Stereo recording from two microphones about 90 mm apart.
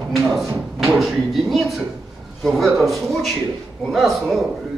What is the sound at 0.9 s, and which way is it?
A man's voice, centre (ahead or behind).